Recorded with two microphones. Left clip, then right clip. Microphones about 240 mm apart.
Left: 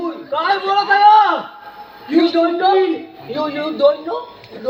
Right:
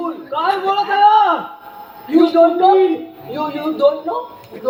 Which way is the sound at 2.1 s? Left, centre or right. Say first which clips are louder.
Right 3 dB; right.